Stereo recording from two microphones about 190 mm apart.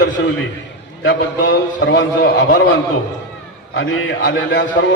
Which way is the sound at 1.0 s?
75° left (ahead or behind).